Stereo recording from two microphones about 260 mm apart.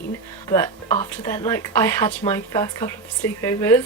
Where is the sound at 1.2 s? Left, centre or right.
Centre.